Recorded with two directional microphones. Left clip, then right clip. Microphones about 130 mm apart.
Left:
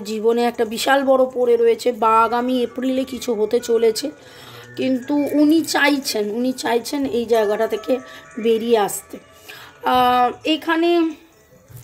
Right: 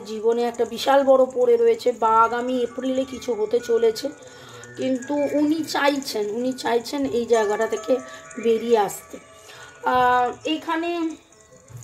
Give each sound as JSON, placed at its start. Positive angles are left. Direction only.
{"t": 0.0, "sound": "speech", "side_deg": 55}
{"t": 1.0, "sound": "speech", "side_deg": 30}
{"t": 9.8, "sound": "speech", "side_deg": 50}